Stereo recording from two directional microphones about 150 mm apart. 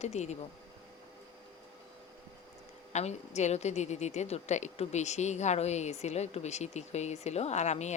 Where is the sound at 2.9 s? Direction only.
50° left (ahead or behind).